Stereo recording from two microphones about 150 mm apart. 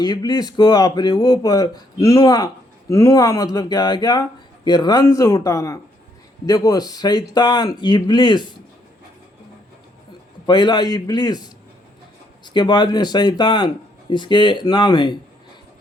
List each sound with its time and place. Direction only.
0.0 s speech: 25° left (ahead or behind)
10.4 s speech: 30° left (ahead or behind)
12.5 s speech: 30° left (ahead or behind)